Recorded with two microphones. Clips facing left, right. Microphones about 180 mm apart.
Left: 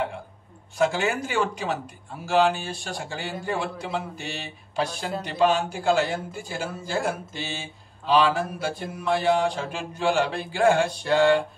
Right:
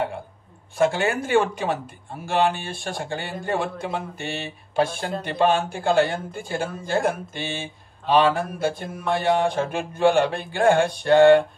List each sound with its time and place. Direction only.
0.7 s a man's voice: 55° right (ahead or behind)